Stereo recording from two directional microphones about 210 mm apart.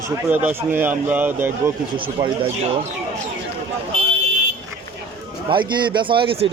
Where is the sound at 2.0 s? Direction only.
25° right (ahead or behind).